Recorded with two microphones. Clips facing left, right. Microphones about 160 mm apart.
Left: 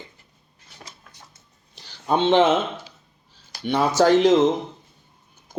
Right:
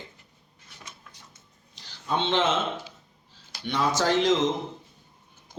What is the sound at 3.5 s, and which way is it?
Speech, 50° left (ahead or behind).